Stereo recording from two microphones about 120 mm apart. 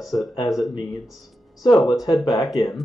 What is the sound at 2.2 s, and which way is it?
Speech, 30° left (ahead or behind).